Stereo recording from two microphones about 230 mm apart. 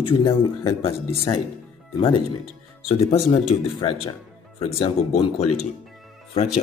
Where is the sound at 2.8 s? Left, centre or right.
Left.